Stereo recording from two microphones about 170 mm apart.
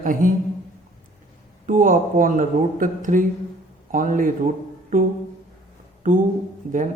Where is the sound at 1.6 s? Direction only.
50° right (ahead or behind).